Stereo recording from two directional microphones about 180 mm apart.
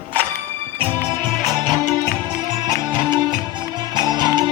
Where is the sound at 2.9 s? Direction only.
25° right (ahead or behind).